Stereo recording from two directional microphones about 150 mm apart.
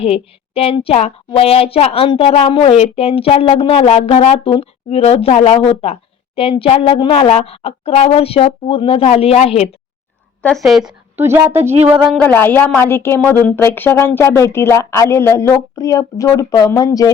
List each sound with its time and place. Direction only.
0.0 s a woman's voice: 40° left (ahead or behind)
10.4 s speech: centre (ahead or behind)
11.2 s speech: 15° right (ahead or behind)
12.0 s speech: 5° left (ahead or behind); by 17.1 s 25° left (ahead or behind)